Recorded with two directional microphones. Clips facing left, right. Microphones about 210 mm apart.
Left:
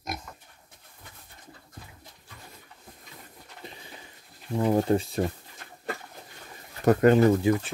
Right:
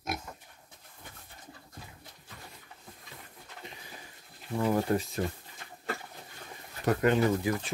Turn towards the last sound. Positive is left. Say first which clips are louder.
# left 7 dB
turn(degrees=25)  # may be behind; listen again after turning